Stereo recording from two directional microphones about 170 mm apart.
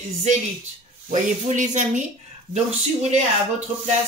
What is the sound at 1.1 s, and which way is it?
Speech, 45° right (ahead or behind).